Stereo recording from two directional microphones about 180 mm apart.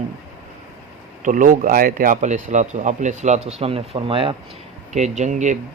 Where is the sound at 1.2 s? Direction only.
45° right (ahead or behind); by 4.4 s 30° right (ahead or behind).